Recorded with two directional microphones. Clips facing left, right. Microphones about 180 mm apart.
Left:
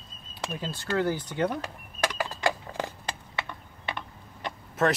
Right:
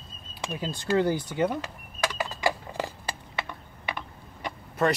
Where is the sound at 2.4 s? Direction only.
10° right (ahead or behind).